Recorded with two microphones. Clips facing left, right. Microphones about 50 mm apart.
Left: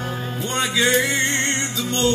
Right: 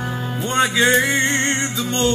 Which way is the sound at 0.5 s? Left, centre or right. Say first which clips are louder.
Right 3 dB; right.